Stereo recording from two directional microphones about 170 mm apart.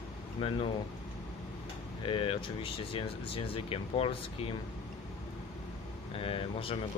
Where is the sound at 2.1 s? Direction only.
30° left (ahead or behind).